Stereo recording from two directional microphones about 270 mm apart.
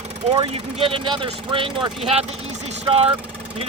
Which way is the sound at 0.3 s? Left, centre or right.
Centre.